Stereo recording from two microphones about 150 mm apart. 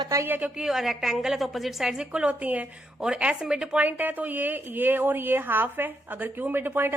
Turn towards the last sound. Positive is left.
turn(degrees=-15)  # may be behind; listen again after turning